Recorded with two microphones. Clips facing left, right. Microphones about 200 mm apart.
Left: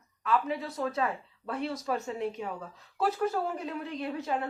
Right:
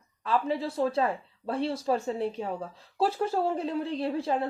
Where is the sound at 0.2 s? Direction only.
30° right (ahead or behind).